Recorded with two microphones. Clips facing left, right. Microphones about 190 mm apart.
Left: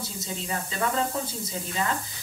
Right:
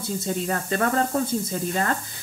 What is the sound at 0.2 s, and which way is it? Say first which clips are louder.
Speech: right 4 dB; 55° right (ahead or behind).